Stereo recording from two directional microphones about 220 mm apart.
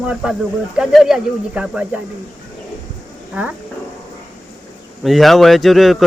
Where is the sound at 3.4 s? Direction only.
5° right (ahead or behind).